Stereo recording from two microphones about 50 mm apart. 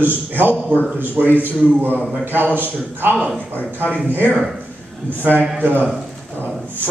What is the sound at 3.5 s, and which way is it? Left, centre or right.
Speech, left.